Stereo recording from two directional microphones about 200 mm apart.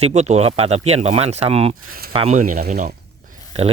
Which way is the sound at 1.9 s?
50° right (ahead or behind).